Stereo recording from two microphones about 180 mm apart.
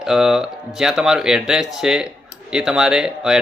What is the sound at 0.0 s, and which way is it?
Speech, 5° right (ahead or behind).